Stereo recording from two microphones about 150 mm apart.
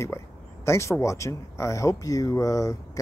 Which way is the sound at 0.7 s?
20° left (ahead or behind).